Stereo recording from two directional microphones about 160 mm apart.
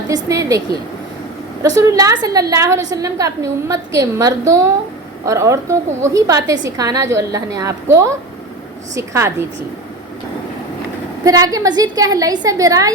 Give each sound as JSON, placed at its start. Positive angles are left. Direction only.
{"t": 0.1, "sound": "a woman's voice", "side_deg": -20}
{"t": 1.6, "sound": "a woman's voice", "side_deg": -20}
{"t": 11.2, "sound": "a woman's voice", "side_deg": -20}